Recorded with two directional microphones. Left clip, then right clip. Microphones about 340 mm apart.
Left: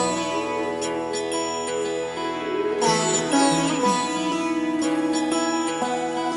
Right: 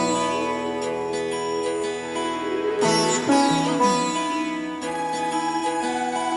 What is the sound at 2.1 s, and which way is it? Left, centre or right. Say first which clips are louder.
Music: even; centre.